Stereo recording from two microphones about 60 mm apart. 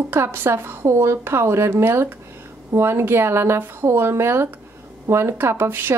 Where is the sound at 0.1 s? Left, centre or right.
Right.